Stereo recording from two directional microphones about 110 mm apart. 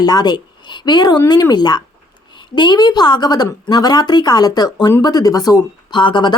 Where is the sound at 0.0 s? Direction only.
35° left (ahead or behind).